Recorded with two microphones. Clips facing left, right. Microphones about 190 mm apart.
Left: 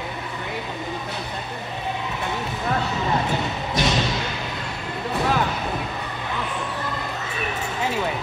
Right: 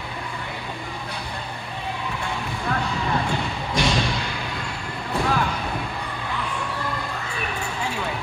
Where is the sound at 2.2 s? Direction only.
20° left (ahead or behind).